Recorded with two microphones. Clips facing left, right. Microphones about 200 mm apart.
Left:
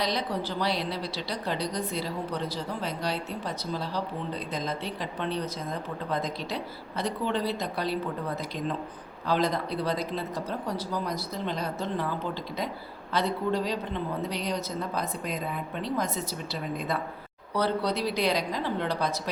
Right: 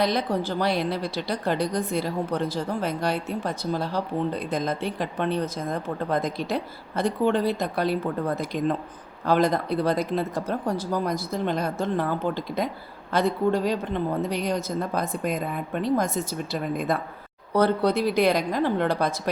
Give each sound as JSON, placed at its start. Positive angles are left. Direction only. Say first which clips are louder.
{"t": 0.0, "sound": "a woman's voice", "louder": "right 5 dB", "side_deg": -50}